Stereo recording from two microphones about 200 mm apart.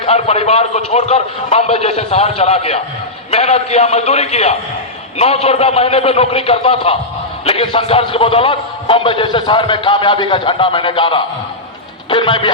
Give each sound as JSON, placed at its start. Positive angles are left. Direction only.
{"t": 0.0, "sound": "a man's voice", "side_deg": 30}